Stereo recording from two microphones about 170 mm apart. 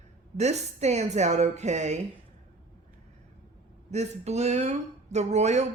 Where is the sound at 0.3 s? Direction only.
40° right (ahead or behind).